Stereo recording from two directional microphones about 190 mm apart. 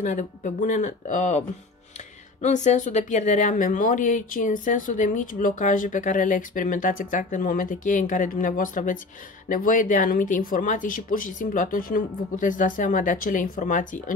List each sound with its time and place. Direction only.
0.0 s speech: 40° left (ahead or behind)
2.4 s speech: 40° left (ahead or behind)